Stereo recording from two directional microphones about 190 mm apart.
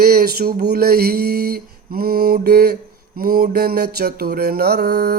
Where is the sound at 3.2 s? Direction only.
50° right (ahead or behind).